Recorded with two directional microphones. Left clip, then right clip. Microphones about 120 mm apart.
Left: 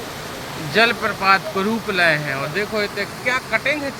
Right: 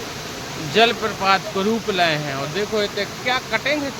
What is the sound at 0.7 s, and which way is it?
Speech, centre (ahead or behind).